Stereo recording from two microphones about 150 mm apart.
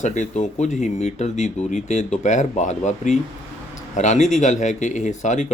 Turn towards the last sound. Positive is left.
turn(degrees=55)  # may be behind; listen again after turning